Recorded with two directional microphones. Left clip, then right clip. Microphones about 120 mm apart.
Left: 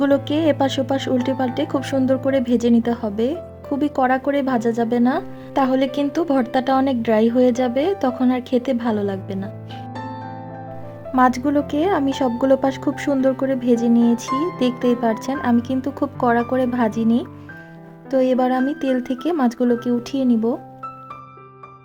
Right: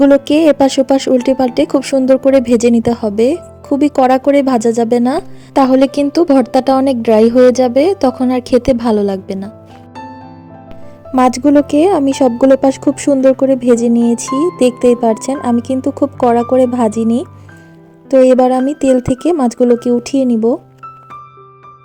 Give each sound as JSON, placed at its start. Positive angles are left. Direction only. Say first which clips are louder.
{"t": 0.0, "sound": "a woman's voice", "louder": "right 9 dB", "side_deg": -50}
{"t": 11.2, "sound": "speech", "louder": "right 7 dB", "side_deg": -45}